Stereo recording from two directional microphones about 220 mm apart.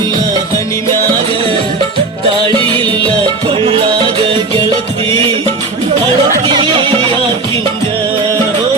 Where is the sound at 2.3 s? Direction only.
20° right (ahead or behind).